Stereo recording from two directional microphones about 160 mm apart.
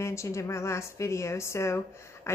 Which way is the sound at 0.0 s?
20° left (ahead or behind).